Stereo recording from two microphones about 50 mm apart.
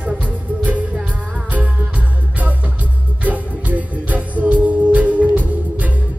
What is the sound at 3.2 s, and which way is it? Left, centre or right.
Music, right.